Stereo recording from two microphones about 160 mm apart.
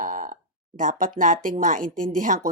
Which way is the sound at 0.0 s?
60° right (ahead or behind).